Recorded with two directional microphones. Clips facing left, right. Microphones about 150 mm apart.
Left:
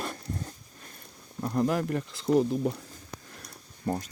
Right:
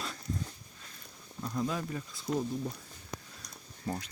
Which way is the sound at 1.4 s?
55° left (ahead or behind).